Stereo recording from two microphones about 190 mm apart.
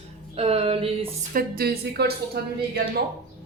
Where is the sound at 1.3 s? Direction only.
50° right (ahead or behind).